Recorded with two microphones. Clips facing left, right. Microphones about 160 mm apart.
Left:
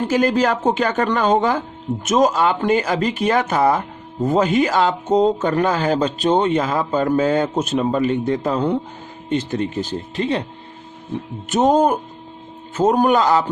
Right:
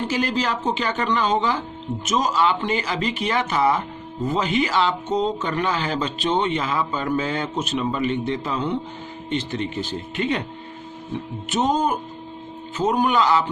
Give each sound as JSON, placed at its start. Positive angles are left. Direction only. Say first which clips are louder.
{"t": 0.1, "sound": "speech", "louder": "left 9 dB", "side_deg": 50}
{"t": 11.4, "sound": "speech", "louder": "left 6 dB", "side_deg": 50}